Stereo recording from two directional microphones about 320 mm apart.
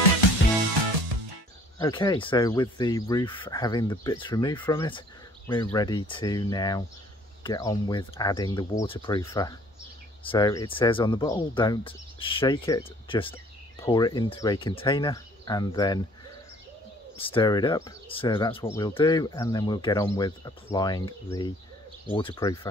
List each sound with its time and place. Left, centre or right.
1.8 s speech: centre